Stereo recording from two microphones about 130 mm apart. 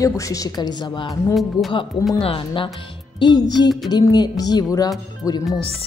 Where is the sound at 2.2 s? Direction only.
40° left (ahead or behind); by 5.4 s 25° left (ahead or behind).